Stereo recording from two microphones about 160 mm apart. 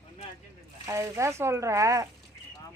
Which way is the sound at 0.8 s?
20° right (ahead or behind).